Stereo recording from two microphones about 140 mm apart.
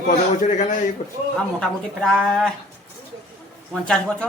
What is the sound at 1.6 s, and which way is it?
Speech, 5° left (ahead or behind).